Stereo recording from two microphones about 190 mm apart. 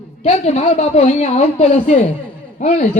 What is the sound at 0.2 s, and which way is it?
A woman's voice, 35° left (ahead or behind).